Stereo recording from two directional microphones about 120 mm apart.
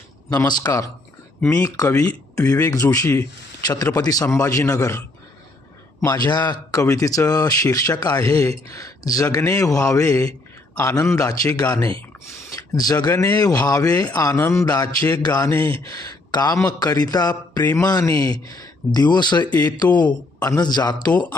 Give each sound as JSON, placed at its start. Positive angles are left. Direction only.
{"t": 0.3, "sound": "speech", "side_deg": 35}
{"t": 1.4, "sound": "speech", "side_deg": 10}
{"t": 1.9, "sound": "a man's voice", "side_deg": 25}